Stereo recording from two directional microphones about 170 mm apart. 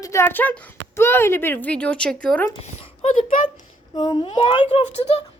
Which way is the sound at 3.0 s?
45° left (ahead or behind).